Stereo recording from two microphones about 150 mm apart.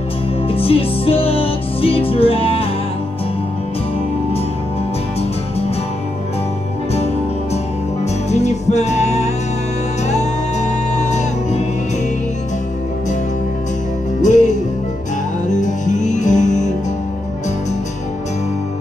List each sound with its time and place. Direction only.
0.5 s music: 40° left (ahead or behind)
8.0 s music: 50° left (ahead or behind)
14.2 s music: 55° left (ahead or behind)